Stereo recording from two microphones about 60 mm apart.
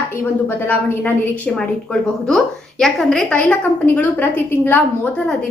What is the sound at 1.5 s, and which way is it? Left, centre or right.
A woman's voice, centre.